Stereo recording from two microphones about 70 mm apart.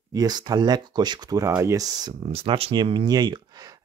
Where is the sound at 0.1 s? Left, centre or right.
Right.